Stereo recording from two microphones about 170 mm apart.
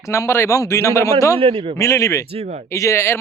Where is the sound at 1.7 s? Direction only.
15° left (ahead or behind).